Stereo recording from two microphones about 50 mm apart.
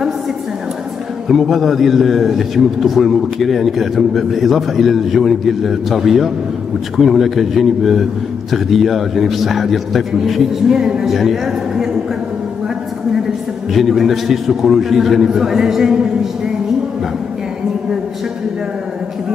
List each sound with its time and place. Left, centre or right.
1.3 s a man's voice: centre
13.7 s a man's voice: centre